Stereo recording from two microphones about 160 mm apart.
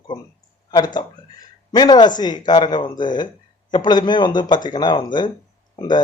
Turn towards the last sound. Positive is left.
turn(degrees=25)  # may be behind; listen again after turning